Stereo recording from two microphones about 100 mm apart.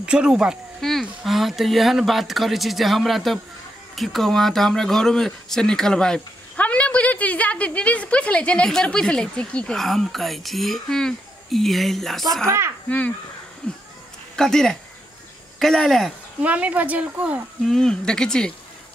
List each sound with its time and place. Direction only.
0.0 s speech: 10° right (ahead or behind)
12.4 s speech: 25° right (ahead or behind)
13.6 s speech: 10° left (ahead or behind)
16.4 s speech: 15° right (ahead or behind)
17.6 s speech: 5° left (ahead or behind)